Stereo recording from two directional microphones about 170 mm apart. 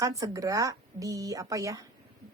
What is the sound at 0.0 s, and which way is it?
A woman's voice, 20° right (ahead or behind).